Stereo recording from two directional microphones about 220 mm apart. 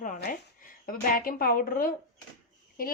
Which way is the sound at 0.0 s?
40° left (ahead or behind).